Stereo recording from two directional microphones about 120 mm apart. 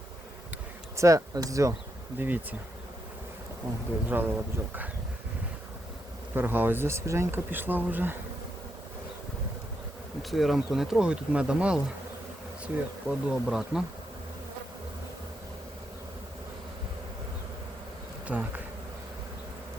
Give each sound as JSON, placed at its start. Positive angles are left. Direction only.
{"t": 0.9, "sound": "speech", "side_deg": -25}
{"t": 2.1, "sound": "speech", "side_deg": -15}
{"t": 4.1, "sound": "speech", "side_deg": -15}
{"t": 6.3, "sound": "speech", "side_deg": -15}
{"t": 10.2, "sound": "speech", "side_deg": 0}
{"t": 18.3, "sound": "speech", "side_deg": -15}